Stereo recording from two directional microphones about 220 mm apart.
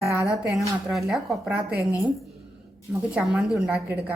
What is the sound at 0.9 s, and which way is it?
Speech, centre (ahead or behind).